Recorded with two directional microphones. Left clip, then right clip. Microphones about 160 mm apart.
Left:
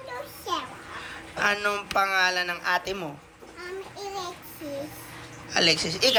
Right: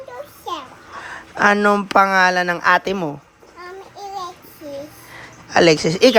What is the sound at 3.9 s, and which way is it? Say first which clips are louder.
Child singing: right 7 dB; centre (ahead or behind).